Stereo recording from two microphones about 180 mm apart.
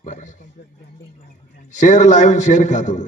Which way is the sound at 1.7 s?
45° left (ahead or behind).